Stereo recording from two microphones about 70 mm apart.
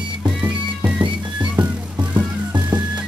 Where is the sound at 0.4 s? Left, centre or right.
Centre.